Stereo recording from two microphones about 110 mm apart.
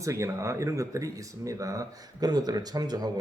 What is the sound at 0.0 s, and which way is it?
Speech, 30° right (ahead or behind).